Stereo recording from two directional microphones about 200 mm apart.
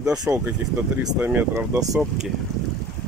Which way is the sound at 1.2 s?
10° right (ahead or behind).